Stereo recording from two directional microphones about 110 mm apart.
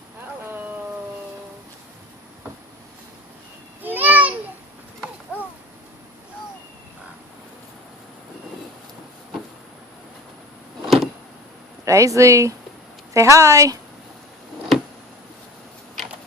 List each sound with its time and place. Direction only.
3.8 s a sound: 15° right (ahead or behind)
10.8 s vehicle: centre (ahead or behind)
11.9 s speech: 30° right (ahead or behind)